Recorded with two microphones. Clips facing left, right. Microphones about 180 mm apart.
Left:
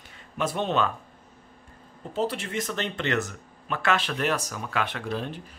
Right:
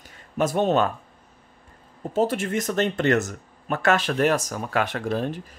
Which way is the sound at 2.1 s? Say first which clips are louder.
Right 5 dB; 45° right (ahead or behind).